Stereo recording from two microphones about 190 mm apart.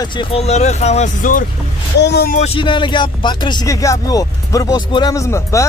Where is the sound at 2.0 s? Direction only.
60° left (ahead or behind).